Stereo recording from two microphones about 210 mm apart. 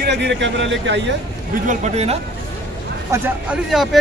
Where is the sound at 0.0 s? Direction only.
55° right (ahead or behind).